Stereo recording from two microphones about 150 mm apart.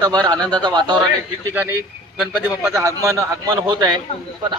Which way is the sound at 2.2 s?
5° right (ahead or behind).